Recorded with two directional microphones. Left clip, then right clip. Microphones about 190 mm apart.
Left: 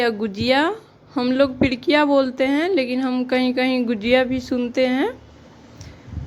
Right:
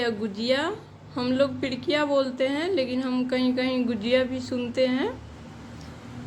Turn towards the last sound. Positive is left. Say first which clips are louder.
# left 5 dB
turn(degrees=40)  # may be behind; listen again after turning